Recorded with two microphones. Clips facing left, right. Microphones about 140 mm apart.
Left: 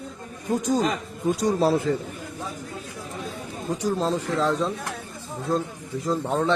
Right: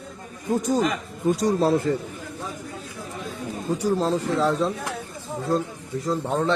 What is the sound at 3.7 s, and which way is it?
Speech, 10° right (ahead or behind).